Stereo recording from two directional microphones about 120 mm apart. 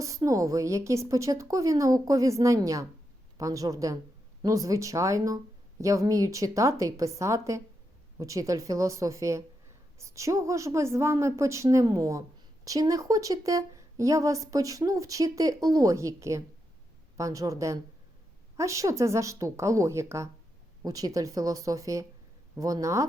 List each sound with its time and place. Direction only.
0.0 s a woman's voice: 25° right (ahead or behind)